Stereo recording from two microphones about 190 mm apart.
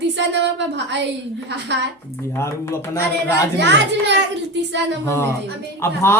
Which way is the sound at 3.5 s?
65° right (ahead or behind).